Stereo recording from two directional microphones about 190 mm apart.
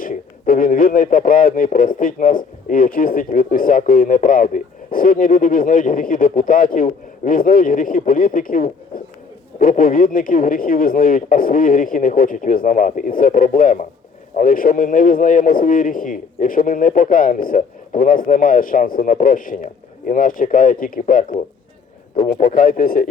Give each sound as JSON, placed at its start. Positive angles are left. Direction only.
{"t": 0.0, "sound": "speech", "side_deg": 45}